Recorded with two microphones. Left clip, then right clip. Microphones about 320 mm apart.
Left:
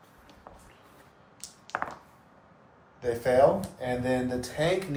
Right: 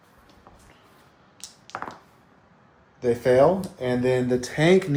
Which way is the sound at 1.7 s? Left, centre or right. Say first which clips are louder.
Left 1 dB; centre.